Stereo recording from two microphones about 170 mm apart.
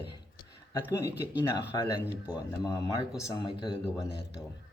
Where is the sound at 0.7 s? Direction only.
20° left (ahead or behind).